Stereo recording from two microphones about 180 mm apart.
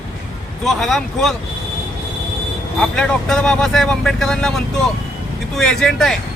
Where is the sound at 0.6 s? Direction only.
Centre (ahead or behind).